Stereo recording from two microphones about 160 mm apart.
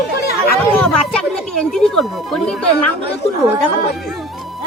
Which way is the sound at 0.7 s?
5° left (ahead or behind).